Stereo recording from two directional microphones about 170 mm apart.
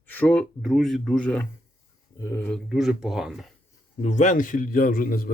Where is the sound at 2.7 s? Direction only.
Centre (ahead or behind).